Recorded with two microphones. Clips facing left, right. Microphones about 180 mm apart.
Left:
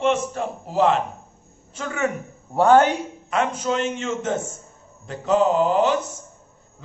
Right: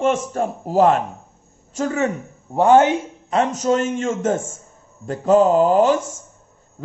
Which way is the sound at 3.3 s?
40° right (ahead or behind).